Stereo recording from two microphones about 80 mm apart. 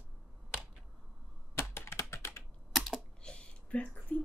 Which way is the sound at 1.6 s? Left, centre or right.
Left.